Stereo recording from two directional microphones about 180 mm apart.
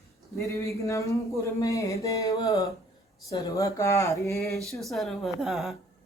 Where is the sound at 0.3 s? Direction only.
15° left (ahead or behind).